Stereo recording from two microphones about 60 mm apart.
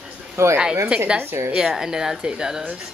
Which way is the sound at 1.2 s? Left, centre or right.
Right.